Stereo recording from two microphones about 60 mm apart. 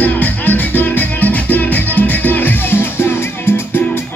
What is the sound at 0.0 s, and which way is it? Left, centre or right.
Music, left.